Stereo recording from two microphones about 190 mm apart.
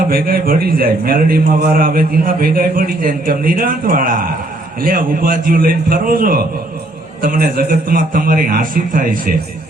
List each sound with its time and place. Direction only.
0.1 s a man's voice: 50° right (ahead or behind)